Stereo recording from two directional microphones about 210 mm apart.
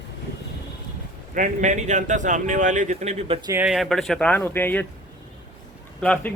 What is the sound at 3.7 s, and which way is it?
Speech, centre (ahead or behind).